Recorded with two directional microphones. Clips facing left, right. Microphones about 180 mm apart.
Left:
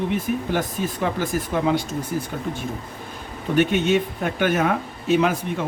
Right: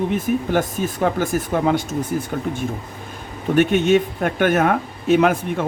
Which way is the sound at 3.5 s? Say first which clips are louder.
Right 3 dB; 50° right (ahead or behind).